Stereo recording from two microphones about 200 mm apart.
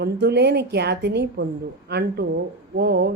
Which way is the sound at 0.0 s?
55° right (ahead or behind).